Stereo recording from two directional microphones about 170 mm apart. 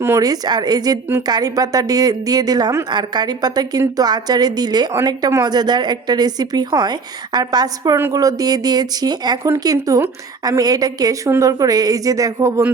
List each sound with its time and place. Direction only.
0.0 s a woman's voice: 15° right (ahead or behind)